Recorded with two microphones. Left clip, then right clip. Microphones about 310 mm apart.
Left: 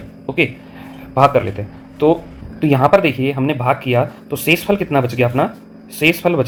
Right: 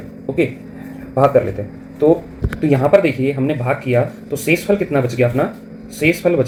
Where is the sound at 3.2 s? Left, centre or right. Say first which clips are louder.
Left 1 dB; left.